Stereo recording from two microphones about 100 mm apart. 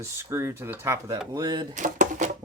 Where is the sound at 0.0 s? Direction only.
25° right (ahead or behind).